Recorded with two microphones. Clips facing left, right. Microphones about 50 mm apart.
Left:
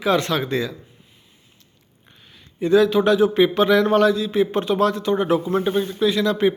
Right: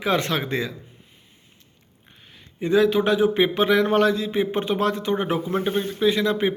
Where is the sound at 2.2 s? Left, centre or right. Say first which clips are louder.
Even; right.